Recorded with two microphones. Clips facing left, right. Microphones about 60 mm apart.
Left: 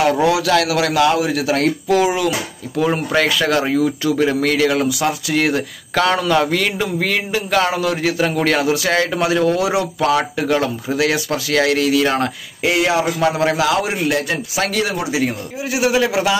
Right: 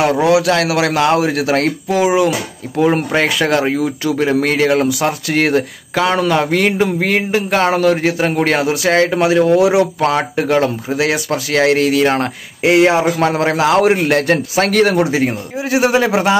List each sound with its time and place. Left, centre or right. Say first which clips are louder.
0.0 s a man's voice: right 3 dB; right
2.0 s a man's voice: right 8 dB; right
6.1 s a man's voice: right 2 dB; right
13.7 s a man's voice: right 6 dB; right